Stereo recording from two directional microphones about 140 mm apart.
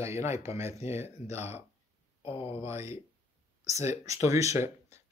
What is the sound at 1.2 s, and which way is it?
Speech, 50° left (ahead or behind).